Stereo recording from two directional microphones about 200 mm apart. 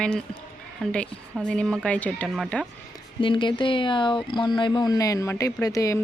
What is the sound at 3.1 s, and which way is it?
Speech, 25° left (ahead or behind).